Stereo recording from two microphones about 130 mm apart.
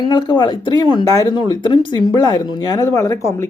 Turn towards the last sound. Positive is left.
turn(degrees=20)  # may be behind; listen again after turning